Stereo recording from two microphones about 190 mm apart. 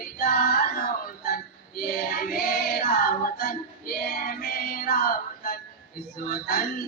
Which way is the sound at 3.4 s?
50° left (ahead or behind).